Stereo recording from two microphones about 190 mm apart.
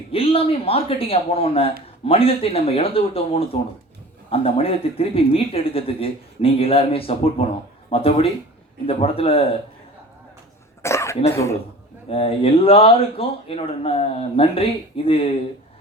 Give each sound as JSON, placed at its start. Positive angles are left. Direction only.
{"t": 0.1, "sound": "speech", "side_deg": 30}
{"t": 10.8, "sound": "cough", "side_deg": 15}
{"t": 11.3, "sound": "speech", "side_deg": 15}
{"t": 12.0, "sound": "speech", "side_deg": 30}